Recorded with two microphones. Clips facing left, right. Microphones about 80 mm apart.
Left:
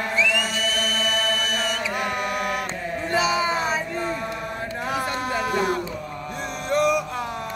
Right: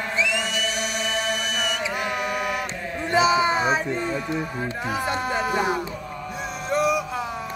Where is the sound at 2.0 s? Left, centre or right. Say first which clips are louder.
Even; centre.